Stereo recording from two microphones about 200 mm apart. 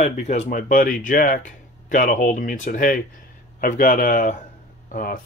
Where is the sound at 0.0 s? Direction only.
35° left (ahead or behind).